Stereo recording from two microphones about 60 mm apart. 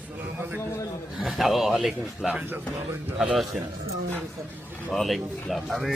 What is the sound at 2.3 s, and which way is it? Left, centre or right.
Speech, right.